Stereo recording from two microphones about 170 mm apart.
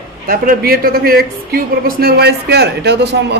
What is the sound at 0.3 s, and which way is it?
A woman's voice, 60° right (ahead or behind).